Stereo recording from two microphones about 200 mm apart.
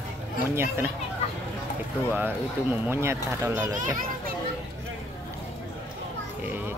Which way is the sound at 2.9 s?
15° right (ahead or behind).